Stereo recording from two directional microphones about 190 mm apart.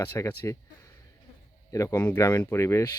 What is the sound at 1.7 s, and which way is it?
Speech, 20° left (ahead or behind).